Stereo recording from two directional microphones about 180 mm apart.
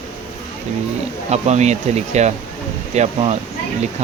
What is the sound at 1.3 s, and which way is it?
Speech, 40° right (ahead or behind).